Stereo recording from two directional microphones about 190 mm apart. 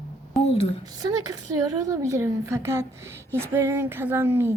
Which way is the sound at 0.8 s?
20° right (ahead or behind).